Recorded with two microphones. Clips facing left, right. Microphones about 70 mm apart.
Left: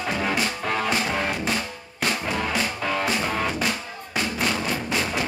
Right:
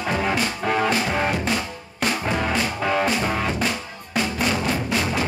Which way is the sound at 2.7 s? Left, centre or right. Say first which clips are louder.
Right 3 dB; centre.